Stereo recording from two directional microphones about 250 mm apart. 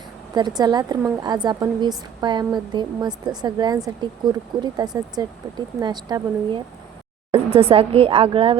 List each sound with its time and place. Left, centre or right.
0.3 s a woman's voice: centre